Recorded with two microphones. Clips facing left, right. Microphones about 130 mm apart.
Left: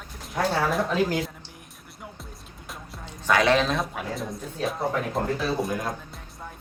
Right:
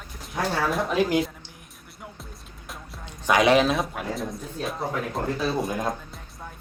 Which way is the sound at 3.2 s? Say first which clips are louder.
Right 2 dB; 15° right (ahead or behind).